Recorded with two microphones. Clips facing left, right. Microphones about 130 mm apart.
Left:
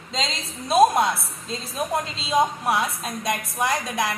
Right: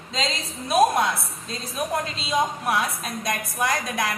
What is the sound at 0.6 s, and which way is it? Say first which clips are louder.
A woman's voice: left 2 dB; 25° left (ahead or behind).